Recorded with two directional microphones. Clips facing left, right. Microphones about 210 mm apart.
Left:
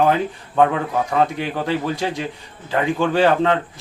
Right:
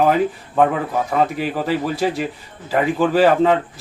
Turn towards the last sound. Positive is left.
turn(degrees=-5)  # may be behind; listen again after turning